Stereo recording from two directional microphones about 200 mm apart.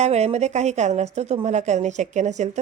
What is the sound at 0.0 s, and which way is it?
Speech, 35° right (ahead or behind).